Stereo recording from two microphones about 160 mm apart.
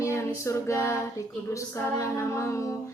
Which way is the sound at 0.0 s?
15° left (ahead or behind).